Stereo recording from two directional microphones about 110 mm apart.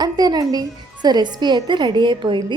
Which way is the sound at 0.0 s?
40° right (ahead or behind).